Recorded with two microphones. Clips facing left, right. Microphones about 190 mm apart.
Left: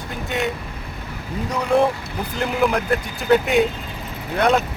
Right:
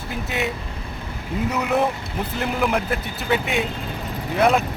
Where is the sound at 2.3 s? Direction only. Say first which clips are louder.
Left 2 dB; centre (ahead or behind).